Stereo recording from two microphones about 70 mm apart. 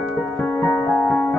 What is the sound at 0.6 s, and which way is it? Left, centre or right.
Music, centre.